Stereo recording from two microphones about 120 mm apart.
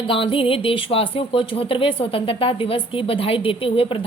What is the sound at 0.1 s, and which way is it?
A woman's voice, 50° left (ahead or behind).